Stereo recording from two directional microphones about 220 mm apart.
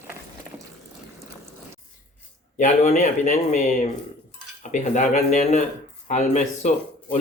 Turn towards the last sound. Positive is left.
turn(degrees=35)  # may be behind; listen again after turning